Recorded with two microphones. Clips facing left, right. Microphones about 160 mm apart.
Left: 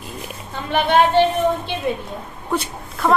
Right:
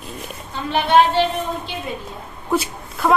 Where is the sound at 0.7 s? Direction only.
55° left (ahead or behind).